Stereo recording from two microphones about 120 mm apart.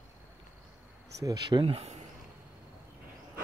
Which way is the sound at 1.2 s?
30° right (ahead or behind).